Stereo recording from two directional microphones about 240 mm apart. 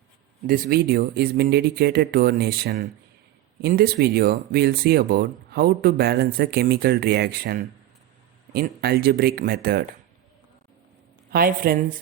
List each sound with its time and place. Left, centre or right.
0.4 s speech: right
11.3 s speech: right